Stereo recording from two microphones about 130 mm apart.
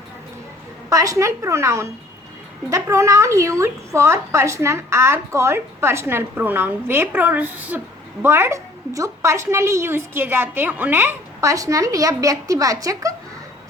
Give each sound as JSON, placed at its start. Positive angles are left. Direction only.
{"t": 0.9, "sound": "a woman's voice", "side_deg": -25}